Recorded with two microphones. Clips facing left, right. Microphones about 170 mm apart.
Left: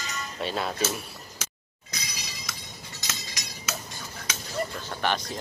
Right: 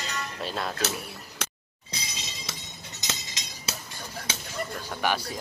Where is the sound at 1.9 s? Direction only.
25° right (ahead or behind).